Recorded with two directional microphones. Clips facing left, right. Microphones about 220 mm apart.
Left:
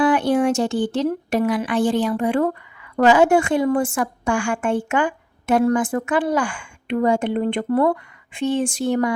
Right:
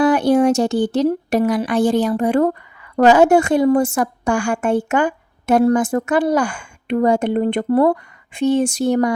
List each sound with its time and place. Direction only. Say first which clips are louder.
0.0 s speech: right 4 dB; 40° right (ahead or behind)